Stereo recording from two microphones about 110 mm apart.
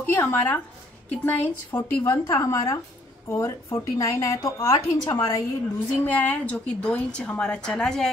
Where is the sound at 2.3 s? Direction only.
30° left (ahead or behind).